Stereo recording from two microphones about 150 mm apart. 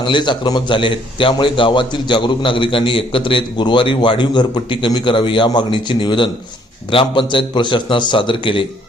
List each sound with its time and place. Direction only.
0.0 s a man's voice: 30° left (ahead or behind)